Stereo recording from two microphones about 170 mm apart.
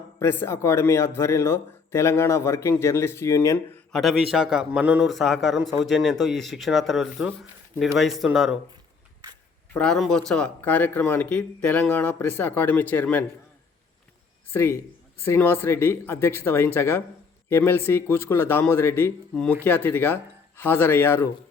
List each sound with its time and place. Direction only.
0.2 s speech: 15° left (ahead or behind)
3.9 s a man's voice: centre (ahead or behind)
9.7 s speech: 5° left (ahead or behind)
14.5 s speech: 15° left (ahead or behind)